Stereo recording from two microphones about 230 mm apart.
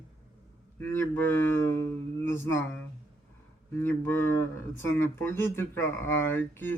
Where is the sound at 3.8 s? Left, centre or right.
Centre.